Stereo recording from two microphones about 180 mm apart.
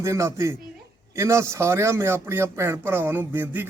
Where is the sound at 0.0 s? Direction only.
15° right (ahead or behind).